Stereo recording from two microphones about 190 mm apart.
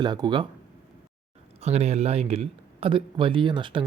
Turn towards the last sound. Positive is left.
turn(degrees=-25)  # may be behind; listen again after turning